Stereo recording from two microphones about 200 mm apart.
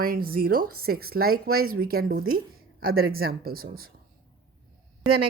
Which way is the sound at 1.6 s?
90° right.